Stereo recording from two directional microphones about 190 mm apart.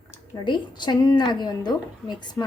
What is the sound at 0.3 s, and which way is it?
A woman's voice, 25° left (ahead or behind).